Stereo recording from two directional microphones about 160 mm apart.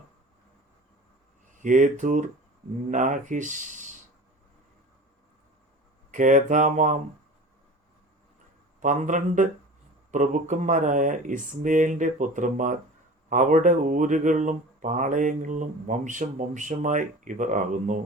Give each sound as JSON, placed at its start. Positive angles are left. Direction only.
{"t": 1.5, "sound": "speech", "side_deg": -55}
{"t": 6.1, "sound": "speech", "side_deg": -55}
{"t": 8.8, "sound": "speech", "side_deg": -50}